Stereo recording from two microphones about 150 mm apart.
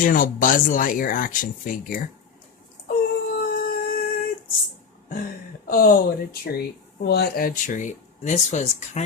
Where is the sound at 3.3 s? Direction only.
75° left (ahead or behind).